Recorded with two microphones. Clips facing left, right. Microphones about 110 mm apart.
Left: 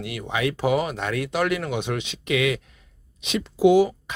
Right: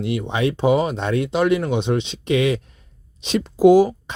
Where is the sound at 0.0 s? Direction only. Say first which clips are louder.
Right 5 dB; 25° right (ahead or behind).